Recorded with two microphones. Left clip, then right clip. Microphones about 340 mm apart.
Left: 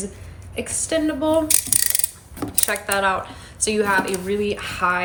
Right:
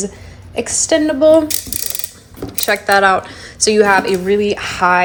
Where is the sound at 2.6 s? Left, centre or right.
Centre.